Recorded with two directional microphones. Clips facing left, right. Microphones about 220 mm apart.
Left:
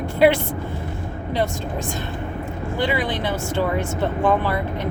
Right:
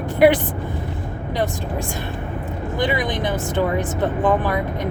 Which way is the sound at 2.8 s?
15° right (ahead or behind).